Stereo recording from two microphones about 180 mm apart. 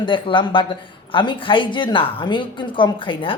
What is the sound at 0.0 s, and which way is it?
Speech, 25° left (ahead or behind).